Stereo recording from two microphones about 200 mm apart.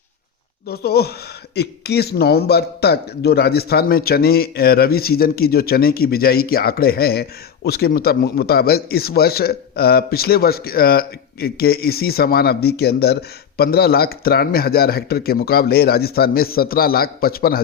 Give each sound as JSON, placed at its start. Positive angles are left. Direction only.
{"t": 0.7, "sound": "a man's voice", "side_deg": 50}